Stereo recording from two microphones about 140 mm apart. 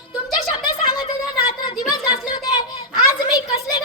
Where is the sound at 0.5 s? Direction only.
35° left (ahead or behind).